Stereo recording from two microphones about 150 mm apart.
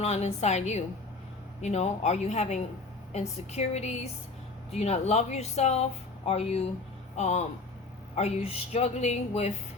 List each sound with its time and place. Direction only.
0.0 s speech: 45° left (ahead or behind)